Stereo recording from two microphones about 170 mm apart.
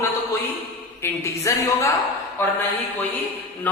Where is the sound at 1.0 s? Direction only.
15° left (ahead or behind).